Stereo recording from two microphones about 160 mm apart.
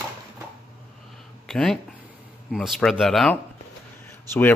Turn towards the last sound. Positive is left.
turn(degrees=10)  # may be behind; listen again after turning